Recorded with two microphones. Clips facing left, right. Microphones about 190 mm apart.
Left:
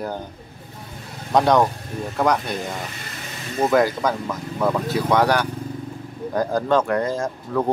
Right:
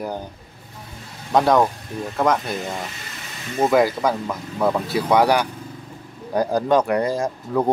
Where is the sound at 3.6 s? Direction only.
10° right (ahead or behind).